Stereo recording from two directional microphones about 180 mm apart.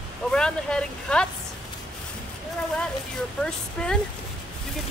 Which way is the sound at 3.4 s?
5° left (ahead or behind).